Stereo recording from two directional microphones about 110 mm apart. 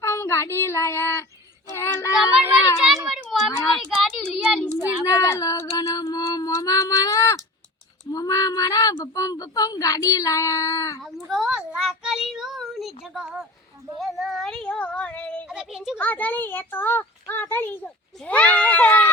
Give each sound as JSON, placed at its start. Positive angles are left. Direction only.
{"t": 0.0, "sound": "child singing", "side_deg": 25}
{"t": 1.7, "sound": "speech", "side_deg": 25}
{"t": 2.1, "sound": "a child's voice", "side_deg": -5}
{"t": 4.8, "sound": "speech", "side_deg": -15}
{"t": 5.0, "sound": "female singing", "side_deg": 30}
{"t": 9.0, "sound": "speech", "side_deg": 30}
{"t": 11.3, "sound": "child singing", "side_deg": -5}
{"t": 14.0, "sound": "a child's voice", "side_deg": 0}
{"t": 15.4, "sound": "speech", "side_deg": -5}
{"t": 16.0, "sound": "a child's voice", "side_deg": 15}